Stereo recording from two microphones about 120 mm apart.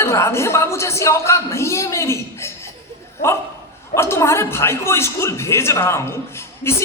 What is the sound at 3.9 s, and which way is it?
Speech, 20° left (ahead or behind).